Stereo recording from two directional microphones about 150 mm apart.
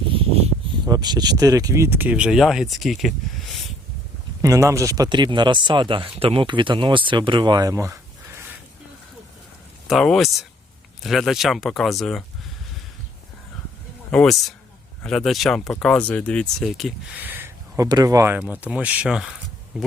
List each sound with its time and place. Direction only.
0.1 s a sound: 40° right (ahead or behind)
0.9 s speech: 25° right (ahead or behind); by 3.6 s centre (ahead or behind)
4.4 s speech: 20° right (ahead or behind)
9.8 s speech: centre (ahead or behind)
14.1 s speech: 5° left (ahead or behind)
17.2 s a sound: 15° right (ahead or behind)
17.8 s speech: 25° right (ahead or behind); by 19.9 s 5° right (ahead or behind)